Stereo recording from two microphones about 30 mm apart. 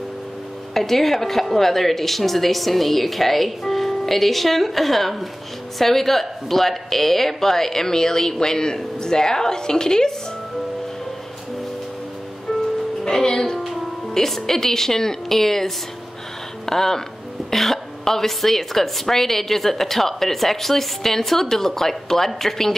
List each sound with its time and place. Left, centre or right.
0.7 s a woman's voice: centre
12.5 s music: centre
13.0 s music: left
14.1 s a woman's voice: centre